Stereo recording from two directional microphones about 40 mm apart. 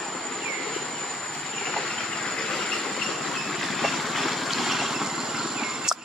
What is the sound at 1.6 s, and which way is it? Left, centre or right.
Train, centre.